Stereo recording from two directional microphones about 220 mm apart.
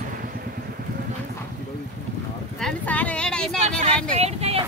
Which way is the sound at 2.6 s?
5° left (ahead or behind).